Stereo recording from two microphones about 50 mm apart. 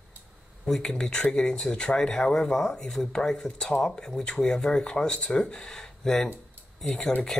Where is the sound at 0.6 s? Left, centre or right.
Centre.